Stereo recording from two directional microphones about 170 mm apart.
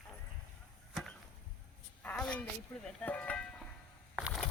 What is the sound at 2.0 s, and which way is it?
Speech, 5° left (ahead or behind).